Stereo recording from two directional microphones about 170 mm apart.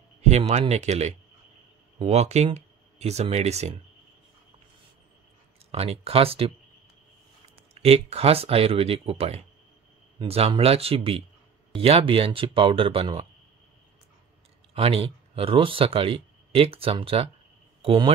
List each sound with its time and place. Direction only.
0.2 s speech: 40° right (ahead or behind)
5.7 s speech: 35° right (ahead or behind)
7.5 s speech: 35° right (ahead or behind)
14.7 s speech: 35° right (ahead or behind)